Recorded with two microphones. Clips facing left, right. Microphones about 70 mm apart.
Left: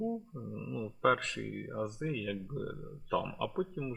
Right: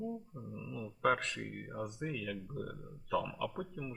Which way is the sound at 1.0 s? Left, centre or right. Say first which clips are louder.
Left 3 dB; centre.